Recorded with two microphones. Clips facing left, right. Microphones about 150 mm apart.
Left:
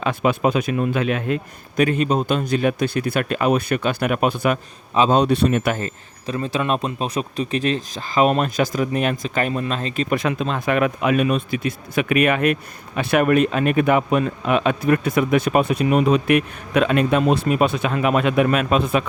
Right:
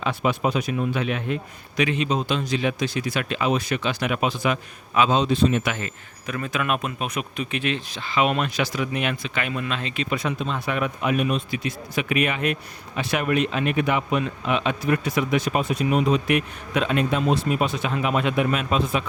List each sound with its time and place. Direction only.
0.0 s speech: 50° left (ahead or behind)
5.1 s speech: 65° left (ahead or behind)
5.8 s speech: 30° left (ahead or behind)
10.2 s speech: 85° left
11.3 s speech: 50° left (ahead or behind)